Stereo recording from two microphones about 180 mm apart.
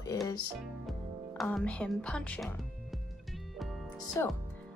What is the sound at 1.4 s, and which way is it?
Speech, 5° left (ahead or behind).